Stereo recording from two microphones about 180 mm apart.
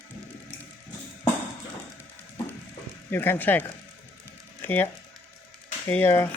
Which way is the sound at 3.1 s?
10° left (ahead or behind).